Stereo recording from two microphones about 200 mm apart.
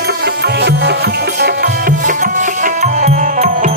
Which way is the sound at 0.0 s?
55° right (ahead or behind).